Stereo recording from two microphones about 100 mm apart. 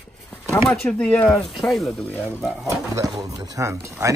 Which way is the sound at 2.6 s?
35° right (ahead or behind).